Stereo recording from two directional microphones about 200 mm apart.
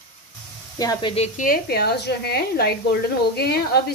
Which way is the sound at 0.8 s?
20° left (ahead or behind).